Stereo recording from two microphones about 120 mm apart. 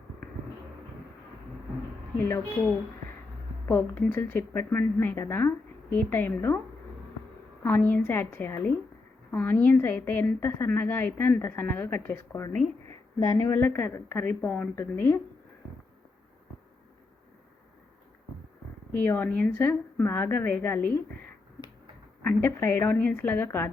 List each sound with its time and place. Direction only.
2.1 s a woman's voice: 20° left (ahead or behind)
3.7 s a woman's voice: 20° left (ahead or behind)
7.6 s a woman's voice: 15° left (ahead or behind)
18.9 s a woman's voice: 15° left (ahead or behind)
22.2 s a woman's voice: 15° left (ahead or behind)